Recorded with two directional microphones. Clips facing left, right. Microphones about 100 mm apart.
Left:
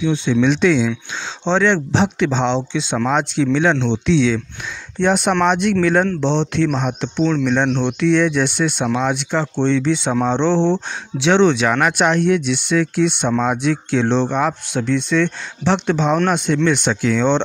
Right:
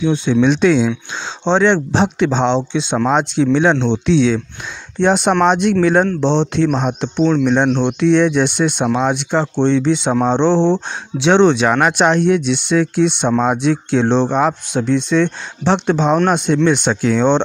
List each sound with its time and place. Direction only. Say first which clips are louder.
0.0 s speech: right 2 dB; 40° right (ahead or behind)